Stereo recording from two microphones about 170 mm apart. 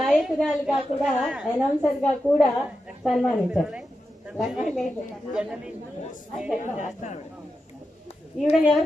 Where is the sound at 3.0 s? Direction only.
Centre (ahead or behind).